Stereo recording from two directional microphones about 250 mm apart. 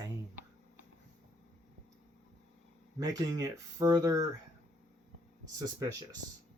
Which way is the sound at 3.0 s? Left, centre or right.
Centre.